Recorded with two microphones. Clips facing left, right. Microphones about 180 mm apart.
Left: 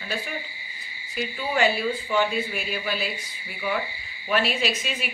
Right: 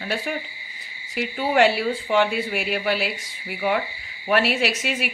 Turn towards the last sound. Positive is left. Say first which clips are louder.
# right 4 dB
turn(degrees=-70)  # may be behind; listen again after turning